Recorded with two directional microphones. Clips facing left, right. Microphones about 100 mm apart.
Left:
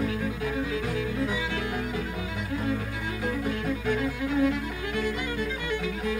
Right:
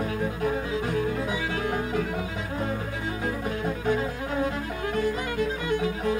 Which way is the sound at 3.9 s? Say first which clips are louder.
Left 1 dB; 35° right (ahead or behind).